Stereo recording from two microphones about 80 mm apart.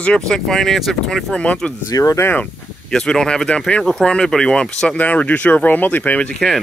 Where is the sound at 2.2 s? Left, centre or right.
Left.